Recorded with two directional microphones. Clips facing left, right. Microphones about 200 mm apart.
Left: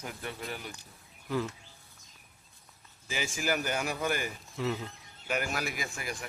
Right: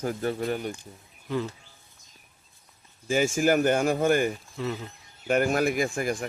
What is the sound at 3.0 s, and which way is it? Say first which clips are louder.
Speech: right 10 dB; 45° right (ahead or behind).